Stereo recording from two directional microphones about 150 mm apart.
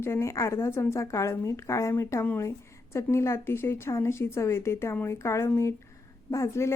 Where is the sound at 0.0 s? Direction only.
15° left (ahead or behind).